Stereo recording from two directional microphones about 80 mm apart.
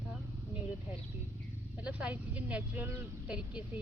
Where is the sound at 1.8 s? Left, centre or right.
Centre.